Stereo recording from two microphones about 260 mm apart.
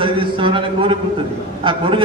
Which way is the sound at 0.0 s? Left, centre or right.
Centre.